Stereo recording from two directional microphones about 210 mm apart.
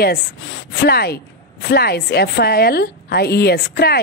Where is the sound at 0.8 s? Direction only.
50° left (ahead or behind).